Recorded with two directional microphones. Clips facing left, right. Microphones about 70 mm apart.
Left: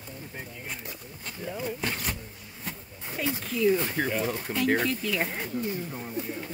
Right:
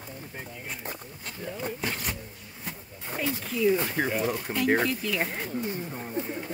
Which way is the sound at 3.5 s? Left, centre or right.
Centre.